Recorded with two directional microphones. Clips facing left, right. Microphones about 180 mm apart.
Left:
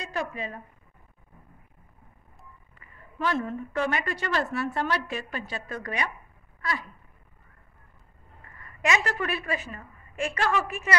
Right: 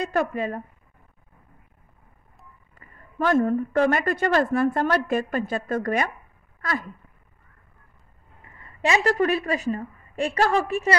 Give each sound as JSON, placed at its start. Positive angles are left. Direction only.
{"t": 0.0, "sound": "speech", "side_deg": -55}
{"t": 2.7, "sound": "a woman's voice", "side_deg": -45}
{"t": 6.6, "sound": "a sound", "side_deg": -45}
{"t": 8.5, "sound": "a woman's voice", "side_deg": -25}